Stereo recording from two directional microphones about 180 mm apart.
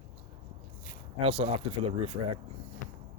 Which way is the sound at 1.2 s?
35° right (ahead or behind).